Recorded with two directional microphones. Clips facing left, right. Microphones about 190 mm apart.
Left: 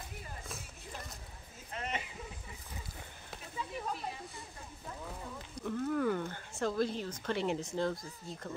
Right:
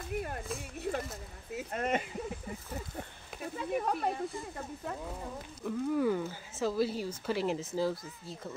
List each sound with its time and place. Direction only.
1.7 s speech: 50° right (ahead or behind)
3.5 s speech: 55° right (ahead or behind)
5.6 s speech: 5° right (ahead or behind)